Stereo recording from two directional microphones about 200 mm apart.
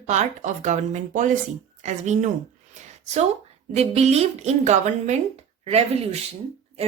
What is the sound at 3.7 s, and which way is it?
A woman's voice, 30° right (ahead or behind).